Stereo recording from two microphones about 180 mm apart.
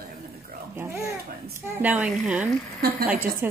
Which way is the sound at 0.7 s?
15° right (ahead or behind).